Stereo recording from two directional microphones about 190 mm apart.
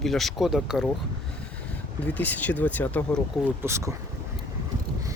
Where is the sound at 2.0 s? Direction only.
10° left (ahead or behind).